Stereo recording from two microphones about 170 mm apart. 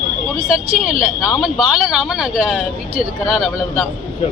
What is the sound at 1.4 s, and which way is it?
A woman's voice, centre (ahead or behind).